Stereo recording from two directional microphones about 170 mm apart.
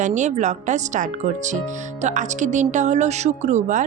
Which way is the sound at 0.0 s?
45° right (ahead or behind).